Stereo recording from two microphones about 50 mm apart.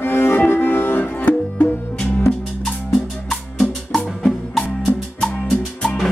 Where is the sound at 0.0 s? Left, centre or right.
Left.